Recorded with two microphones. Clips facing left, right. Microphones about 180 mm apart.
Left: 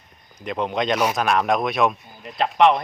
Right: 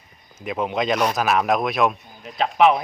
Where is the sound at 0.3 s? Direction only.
5° right (ahead or behind).